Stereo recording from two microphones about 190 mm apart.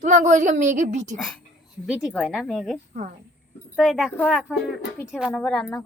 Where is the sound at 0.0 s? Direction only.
40° right (ahead or behind).